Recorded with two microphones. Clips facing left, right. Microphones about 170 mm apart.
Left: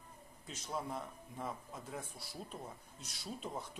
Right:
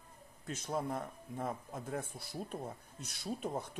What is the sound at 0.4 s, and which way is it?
Speech, 50° right (ahead or behind).